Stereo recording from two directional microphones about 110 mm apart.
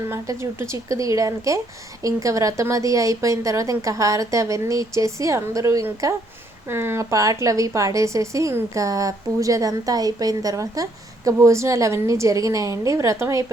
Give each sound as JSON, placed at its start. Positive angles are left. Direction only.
{"t": 0.1, "sound": "a woman's voice", "side_deg": -25}